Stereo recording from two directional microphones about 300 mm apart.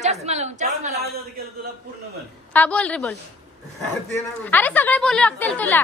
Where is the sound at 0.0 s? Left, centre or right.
Right.